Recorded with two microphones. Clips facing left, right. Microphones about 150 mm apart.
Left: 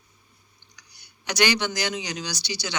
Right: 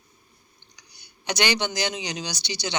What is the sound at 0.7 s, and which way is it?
Speech, 20° right (ahead or behind).